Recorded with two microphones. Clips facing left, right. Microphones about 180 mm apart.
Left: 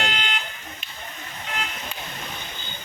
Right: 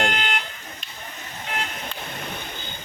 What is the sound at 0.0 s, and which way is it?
Car alarm, 45° right (ahead or behind).